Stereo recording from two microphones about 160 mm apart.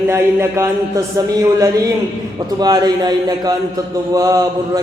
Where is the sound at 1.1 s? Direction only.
20° right (ahead or behind).